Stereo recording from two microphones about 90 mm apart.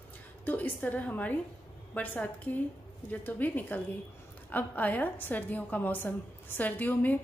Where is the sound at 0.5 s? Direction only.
20° left (ahead or behind).